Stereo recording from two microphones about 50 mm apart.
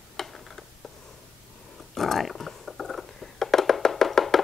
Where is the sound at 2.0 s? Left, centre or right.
Centre.